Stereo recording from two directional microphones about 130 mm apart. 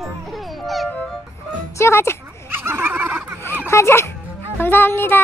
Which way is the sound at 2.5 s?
15° right (ahead or behind).